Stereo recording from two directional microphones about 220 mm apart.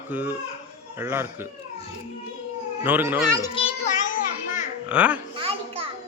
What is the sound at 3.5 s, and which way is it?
Children playing, 30° left (ahead or behind).